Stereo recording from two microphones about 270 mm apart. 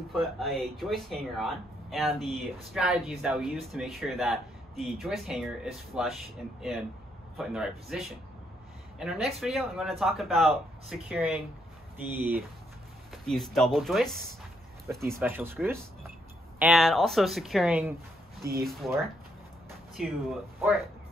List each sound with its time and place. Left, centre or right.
0.1 s speech: centre
7.3 s speech: centre
18.4 s speech: right
20.0 s speech: centre